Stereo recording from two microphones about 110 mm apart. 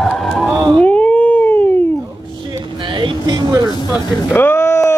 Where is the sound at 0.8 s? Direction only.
15° left (ahead or behind).